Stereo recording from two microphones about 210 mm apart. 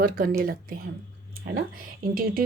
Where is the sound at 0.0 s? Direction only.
45° right (ahead or behind).